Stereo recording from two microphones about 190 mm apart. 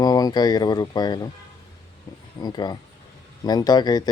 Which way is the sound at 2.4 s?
20° left (ahead or behind).